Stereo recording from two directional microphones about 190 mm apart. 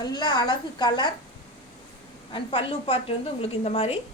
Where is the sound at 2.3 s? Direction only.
30° left (ahead or behind).